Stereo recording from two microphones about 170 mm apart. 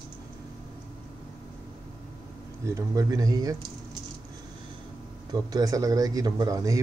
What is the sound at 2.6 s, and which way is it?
Speech, 15° right (ahead or behind).